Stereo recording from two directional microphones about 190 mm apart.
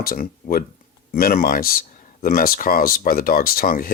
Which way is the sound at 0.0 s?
50° left (ahead or behind).